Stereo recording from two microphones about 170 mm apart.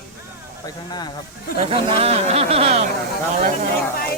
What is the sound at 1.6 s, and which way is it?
Speech, 35° right (ahead or behind).